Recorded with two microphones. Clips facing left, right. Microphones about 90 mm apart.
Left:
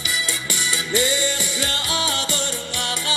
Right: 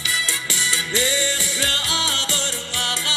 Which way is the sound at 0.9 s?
20° left (ahead or behind).